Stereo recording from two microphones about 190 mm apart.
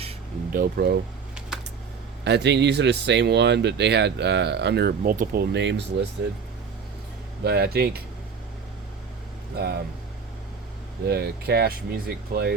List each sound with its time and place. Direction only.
0.5 s speech: 50° right (ahead or behind)
2.2 s speech: 65° right (ahead or behind)
7.4 s speech: 55° right (ahead or behind)
9.6 s speech: 55° right (ahead or behind)
11.0 s speech: 55° right (ahead or behind)